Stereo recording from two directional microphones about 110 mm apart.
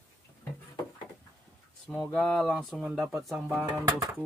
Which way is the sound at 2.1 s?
Centre (ahead or behind).